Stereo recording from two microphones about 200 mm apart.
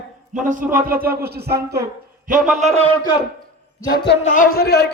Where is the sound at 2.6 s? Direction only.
35° right (ahead or behind).